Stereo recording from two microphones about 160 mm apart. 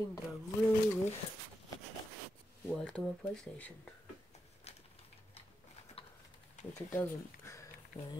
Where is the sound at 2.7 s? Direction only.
5° left (ahead or behind).